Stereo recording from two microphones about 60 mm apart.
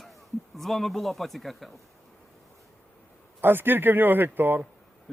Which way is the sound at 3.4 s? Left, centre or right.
Right.